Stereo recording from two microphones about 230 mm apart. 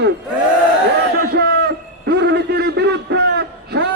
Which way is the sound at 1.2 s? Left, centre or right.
Right.